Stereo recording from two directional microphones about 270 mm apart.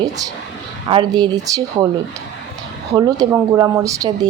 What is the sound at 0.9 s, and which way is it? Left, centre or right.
Speech, centre.